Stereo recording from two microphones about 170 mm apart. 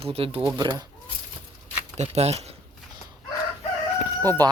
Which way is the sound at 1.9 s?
40° right (ahead or behind).